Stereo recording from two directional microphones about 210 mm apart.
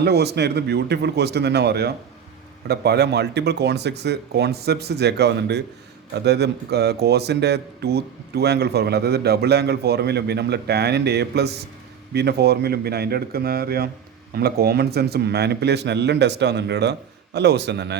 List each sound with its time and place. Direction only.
0.0 s a man's voice: 50° right (ahead or behind)